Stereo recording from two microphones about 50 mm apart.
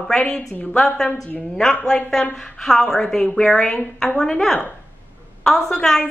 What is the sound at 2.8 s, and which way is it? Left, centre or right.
A woman's voice, centre.